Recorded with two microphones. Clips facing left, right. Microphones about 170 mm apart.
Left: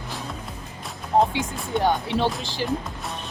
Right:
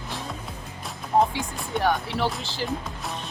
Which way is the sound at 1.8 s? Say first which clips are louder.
Left 2 dB; 20° left (ahead or behind).